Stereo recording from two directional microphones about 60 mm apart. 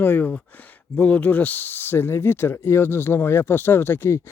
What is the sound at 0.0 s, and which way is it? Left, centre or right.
Speech, left.